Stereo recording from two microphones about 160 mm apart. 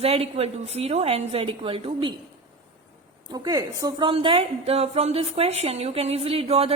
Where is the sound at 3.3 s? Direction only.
25° right (ahead or behind).